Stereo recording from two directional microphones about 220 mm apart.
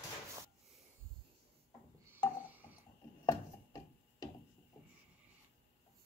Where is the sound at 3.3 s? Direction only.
15° left (ahead or behind).